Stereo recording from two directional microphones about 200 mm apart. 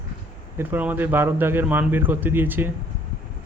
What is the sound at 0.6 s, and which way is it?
Speech, 10° right (ahead or behind).